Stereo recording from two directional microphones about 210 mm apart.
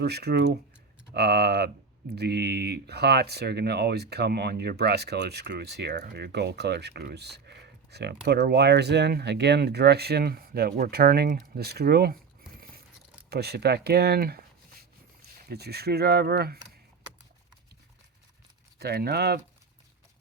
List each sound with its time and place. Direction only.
0.0 s speech: 50° right (ahead or behind)
12.5 s a sound: 45° right (ahead or behind)
13.3 s speech: 50° right (ahead or behind)
18.8 s speech: 50° right (ahead or behind)